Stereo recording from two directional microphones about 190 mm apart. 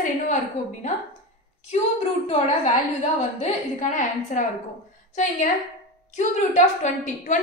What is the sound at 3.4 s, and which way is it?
A woman's voice, 40° left (ahead or behind).